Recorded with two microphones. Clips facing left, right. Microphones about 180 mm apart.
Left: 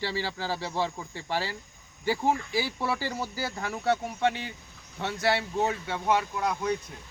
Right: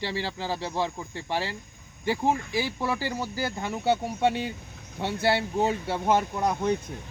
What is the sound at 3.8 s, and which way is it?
Speech, 30° right (ahead or behind).